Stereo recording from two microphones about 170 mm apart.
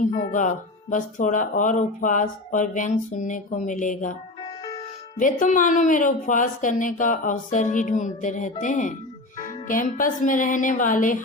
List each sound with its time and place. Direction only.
0.0 s speech: 50° left (ahead or behind)
5.1 s speech: 50° left (ahead or behind)